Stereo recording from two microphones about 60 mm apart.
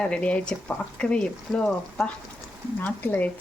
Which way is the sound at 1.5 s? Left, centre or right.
Centre.